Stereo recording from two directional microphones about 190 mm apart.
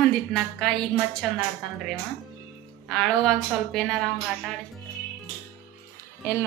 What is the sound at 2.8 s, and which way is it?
A woman's voice, centre (ahead or behind).